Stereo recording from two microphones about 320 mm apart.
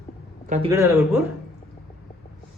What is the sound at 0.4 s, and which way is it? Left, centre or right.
Speech, right.